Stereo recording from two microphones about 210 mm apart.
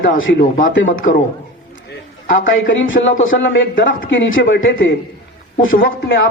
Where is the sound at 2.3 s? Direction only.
60° left (ahead or behind).